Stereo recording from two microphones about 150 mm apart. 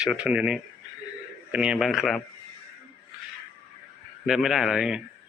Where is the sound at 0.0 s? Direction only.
5° right (ahead or behind).